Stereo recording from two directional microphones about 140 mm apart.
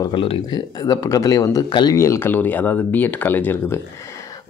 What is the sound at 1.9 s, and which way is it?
Speech, 20° left (ahead or behind).